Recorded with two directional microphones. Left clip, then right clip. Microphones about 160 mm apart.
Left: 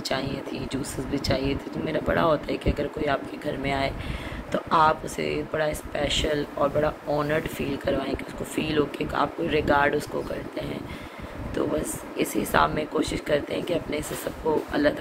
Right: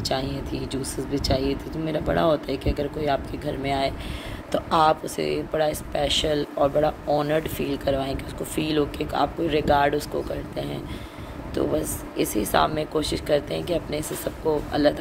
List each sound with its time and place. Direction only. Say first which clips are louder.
0.0 s speech: right 2 dB; 20° right (ahead or behind)
4.5 s speech: right 1 dB; 35° right (ahead or behind)
7.1 s speech: right 3 dB; 20° right (ahead or behind)
7.3 s speech: right 2 dB; 30° right (ahead or behind)